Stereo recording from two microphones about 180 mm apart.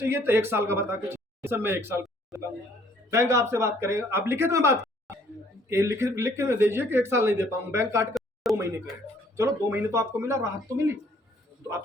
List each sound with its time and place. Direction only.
0.0 s speech: 15° right (ahead or behind)
8.4 s a sound: centre (ahead or behind)
9.3 s speech: 15° right (ahead or behind)